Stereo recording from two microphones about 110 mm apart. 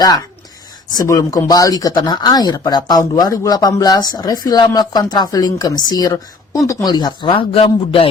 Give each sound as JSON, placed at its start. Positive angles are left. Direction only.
{"t": 0.9, "sound": "speech", "side_deg": 30}